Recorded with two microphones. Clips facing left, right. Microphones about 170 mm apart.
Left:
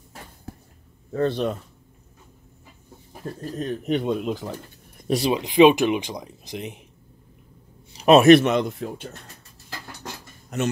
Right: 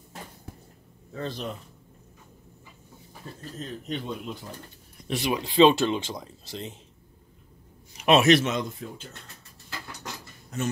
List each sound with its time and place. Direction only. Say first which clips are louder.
1.1 s speech: left 11 dB; 60° left (ahead or behind)
3.5 s speech: left 9 dB; 65° left (ahead or behind); by 4.6 s 85° left
4.9 s a sound: left 7 dB; 40° left (ahead or behind)
5.3 s speech: left 3 dB; 15° left (ahead or behind)
7.9 s a sound: left 6 dB; 35° left (ahead or behind)
8.2 s speech: left 7 dB; 55° left (ahead or behind)
10.5 s a man's voice: left 5 dB; 70° left (ahead or behind)